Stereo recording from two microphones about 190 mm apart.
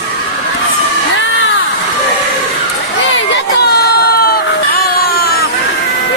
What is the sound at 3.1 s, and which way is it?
Crowd, 60° left (ahead or behind).